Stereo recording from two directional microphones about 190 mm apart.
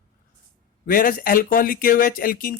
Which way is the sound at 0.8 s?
50° left (ahead or behind).